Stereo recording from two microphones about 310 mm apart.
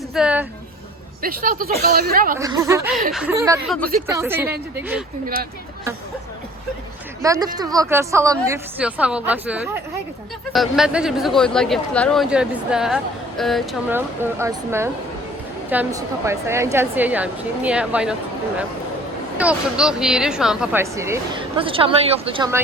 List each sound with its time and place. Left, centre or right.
0.1 s a sound: centre
1.2 s speech: right
2.4 s speech: centre
7.2 s speech: centre